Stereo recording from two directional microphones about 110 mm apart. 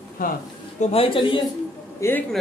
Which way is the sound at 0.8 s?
65° left (ahead or behind).